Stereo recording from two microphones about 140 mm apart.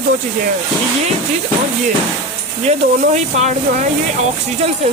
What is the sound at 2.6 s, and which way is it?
Speech, 55° right (ahead or behind).